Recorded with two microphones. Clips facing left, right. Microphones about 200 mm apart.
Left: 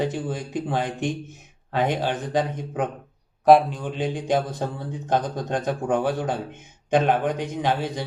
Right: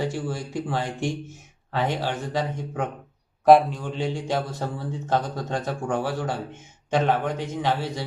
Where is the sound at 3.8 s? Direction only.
20° left (ahead or behind).